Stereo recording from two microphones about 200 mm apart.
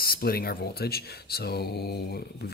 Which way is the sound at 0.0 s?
50° left (ahead or behind).